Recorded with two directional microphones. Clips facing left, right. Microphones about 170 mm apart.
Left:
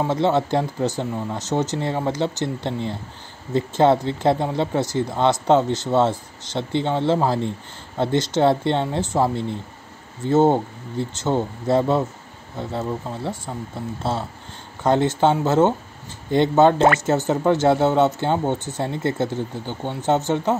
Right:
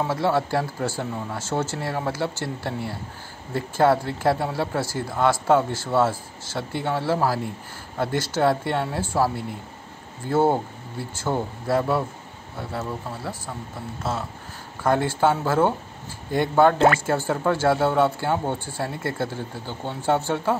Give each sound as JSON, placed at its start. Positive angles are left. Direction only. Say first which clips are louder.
{"t": 0.0, "sound": "speech", "louder": "left 3 dB", "side_deg": 20}